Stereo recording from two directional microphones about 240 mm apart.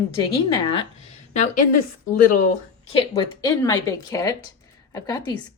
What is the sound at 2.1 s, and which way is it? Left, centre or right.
Speech, left.